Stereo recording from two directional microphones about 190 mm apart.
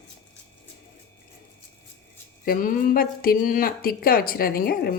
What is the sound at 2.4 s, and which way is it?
Speech, 50° left (ahead or behind).